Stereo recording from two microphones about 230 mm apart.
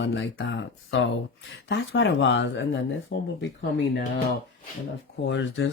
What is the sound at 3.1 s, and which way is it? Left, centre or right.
Speech, left.